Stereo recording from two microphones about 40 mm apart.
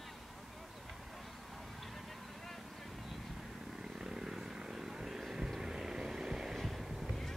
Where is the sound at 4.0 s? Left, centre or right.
Centre.